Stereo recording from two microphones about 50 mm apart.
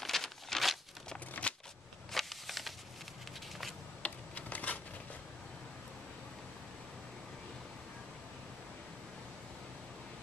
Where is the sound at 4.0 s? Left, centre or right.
Left.